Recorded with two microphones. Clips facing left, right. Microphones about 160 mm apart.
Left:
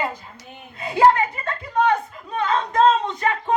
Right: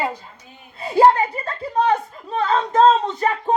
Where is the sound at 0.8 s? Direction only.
35° right (ahead or behind).